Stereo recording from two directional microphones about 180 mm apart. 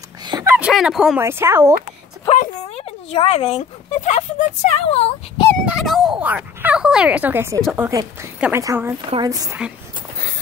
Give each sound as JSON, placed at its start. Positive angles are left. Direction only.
{"t": 0.2, "sound": "dog", "side_deg": -20}
{"t": 0.6, "sound": "speech", "side_deg": -5}
{"t": 1.2, "sound": "speech", "side_deg": -15}
{"t": 2.2, "sound": "speech", "side_deg": 35}
{"t": 5.7, "sound": "speech", "side_deg": 0}